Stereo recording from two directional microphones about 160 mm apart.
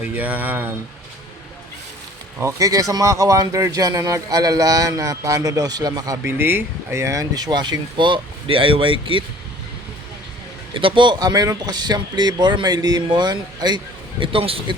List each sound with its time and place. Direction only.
0.2 s speech: 10° right (ahead or behind)
2.4 s speech: 20° right (ahead or behind)
10.8 s speech: 30° right (ahead or behind)